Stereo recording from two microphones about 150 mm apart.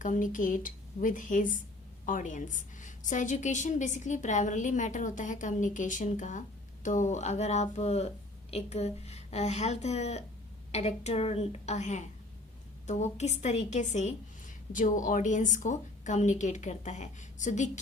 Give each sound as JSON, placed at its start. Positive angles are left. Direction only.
{"t": 0.0, "sound": "a woman's voice", "side_deg": 60}